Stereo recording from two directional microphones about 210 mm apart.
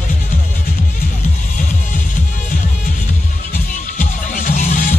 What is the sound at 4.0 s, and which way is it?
Music, 35° left (ahead or behind).